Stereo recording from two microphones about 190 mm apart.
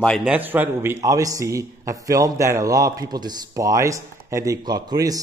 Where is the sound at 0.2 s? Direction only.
10° right (ahead or behind).